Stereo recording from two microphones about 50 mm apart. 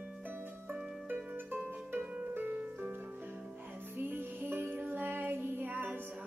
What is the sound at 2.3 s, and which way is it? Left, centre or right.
Music, right.